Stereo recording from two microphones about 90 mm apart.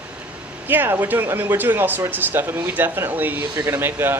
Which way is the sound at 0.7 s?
25° right (ahead or behind).